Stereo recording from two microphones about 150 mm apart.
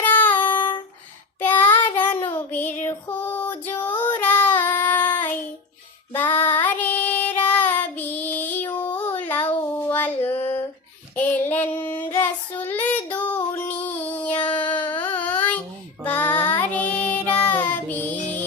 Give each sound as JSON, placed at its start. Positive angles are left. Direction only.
{"t": 0.0, "sound": "child singing", "side_deg": 10}
{"t": 2.3, "sound": "female singing", "side_deg": 10}
{"t": 5.1, "sound": "child singing", "side_deg": 10}
{"t": 10.3, "sound": "a sound", "side_deg": 40}
{"t": 11.1, "sound": "child singing", "side_deg": 10}
{"t": 15.0, "sound": "a sound", "side_deg": 10}
{"t": 16.0, "sound": "child singing", "side_deg": 10}